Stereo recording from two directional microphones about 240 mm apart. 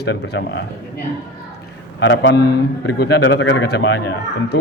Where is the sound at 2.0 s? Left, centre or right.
Left.